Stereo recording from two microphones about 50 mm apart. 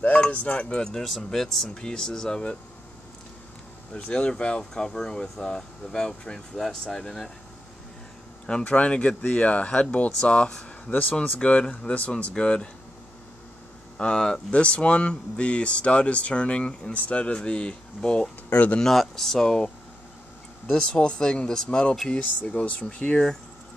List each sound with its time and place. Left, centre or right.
0.0 s speech: left; by 1.7 s centre
1.7 s speech: centre
3.9 s speech: left
8.6 s speech: left
10.9 s speech: left
11.3 s speech: left
13.9 s speech: centre
18.8 s speech: centre
20.7 s speech: left